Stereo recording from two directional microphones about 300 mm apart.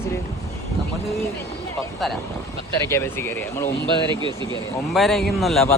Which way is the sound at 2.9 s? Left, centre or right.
Centre.